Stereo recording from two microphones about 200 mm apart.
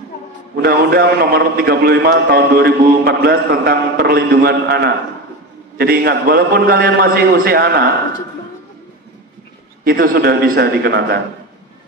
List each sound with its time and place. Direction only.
0.6 s a man's voice: 50° right (ahead or behind)
9.8 s a man's voice: 50° right (ahead or behind)